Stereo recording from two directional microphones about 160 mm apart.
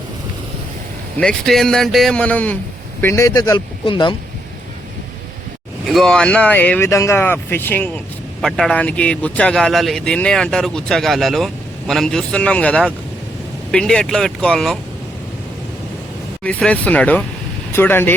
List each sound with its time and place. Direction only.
1.2 s speech: 5° left (ahead or behind); by 4.1 s 30° left (ahead or behind)
5.8 s speech: centre (ahead or behind)
16.4 s speech: 10° left (ahead or behind)